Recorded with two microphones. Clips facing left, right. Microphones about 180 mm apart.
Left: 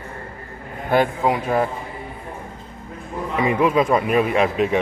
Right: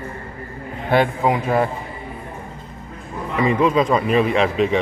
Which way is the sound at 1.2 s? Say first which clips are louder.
Right 1 dB; centre (ahead or behind).